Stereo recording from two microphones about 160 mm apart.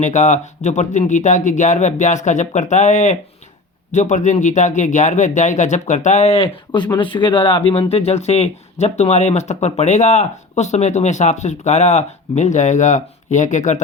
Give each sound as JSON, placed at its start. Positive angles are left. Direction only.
{"t": 0.0, "sound": "speech", "side_deg": 45}
{"t": 6.7, "sound": "speech", "side_deg": 25}